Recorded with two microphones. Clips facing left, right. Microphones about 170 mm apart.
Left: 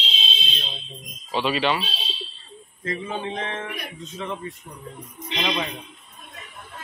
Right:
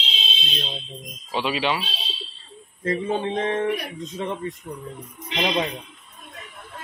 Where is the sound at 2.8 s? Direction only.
35° right (ahead or behind).